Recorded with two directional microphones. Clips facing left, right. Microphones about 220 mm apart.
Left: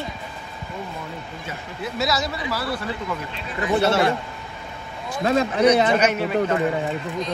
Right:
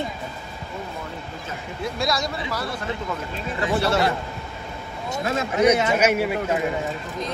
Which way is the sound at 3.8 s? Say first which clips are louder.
Left 3 dB; 25° left (ahead or behind).